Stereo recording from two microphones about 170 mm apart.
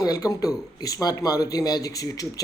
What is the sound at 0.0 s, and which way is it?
A man's voice, 20° left (ahead or behind).